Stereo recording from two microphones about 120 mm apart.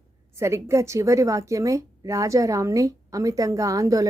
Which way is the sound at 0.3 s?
25° right (ahead or behind).